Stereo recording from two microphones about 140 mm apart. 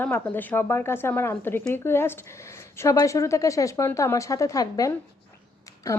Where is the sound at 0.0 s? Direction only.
15° left (ahead or behind).